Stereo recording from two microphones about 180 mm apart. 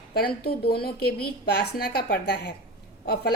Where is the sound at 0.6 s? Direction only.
60° left (ahead or behind).